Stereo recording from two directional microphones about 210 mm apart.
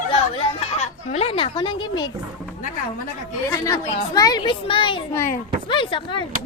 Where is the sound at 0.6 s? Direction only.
30° left (ahead or behind).